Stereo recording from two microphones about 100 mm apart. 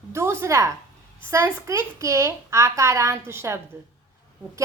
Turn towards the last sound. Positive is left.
turn(degrees=-25)  # may be behind; listen again after turning